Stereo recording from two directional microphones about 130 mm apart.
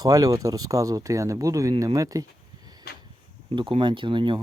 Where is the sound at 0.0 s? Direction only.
25° right (ahead or behind).